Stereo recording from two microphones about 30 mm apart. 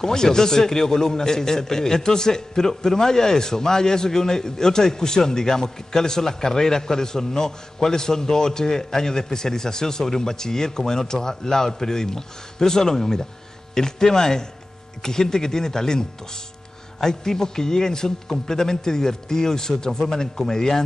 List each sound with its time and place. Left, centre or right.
0.0 s a man's voice: left